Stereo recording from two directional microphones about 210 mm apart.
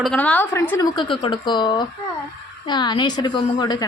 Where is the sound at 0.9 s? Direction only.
25° left (ahead or behind).